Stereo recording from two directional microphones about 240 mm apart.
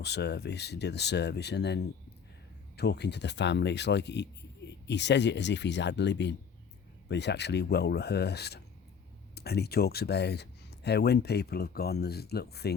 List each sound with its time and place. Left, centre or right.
0.0 s speech: left